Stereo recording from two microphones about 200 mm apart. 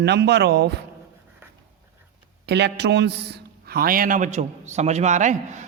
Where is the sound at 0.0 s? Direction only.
55° right (ahead or behind).